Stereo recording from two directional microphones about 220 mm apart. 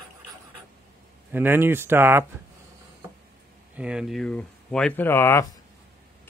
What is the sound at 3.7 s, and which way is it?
Speech, 5° right (ahead or behind).